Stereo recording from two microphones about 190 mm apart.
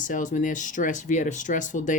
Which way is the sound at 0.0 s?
40° left (ahead or behind).